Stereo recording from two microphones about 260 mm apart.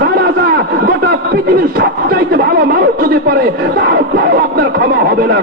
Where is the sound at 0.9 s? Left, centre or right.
Right.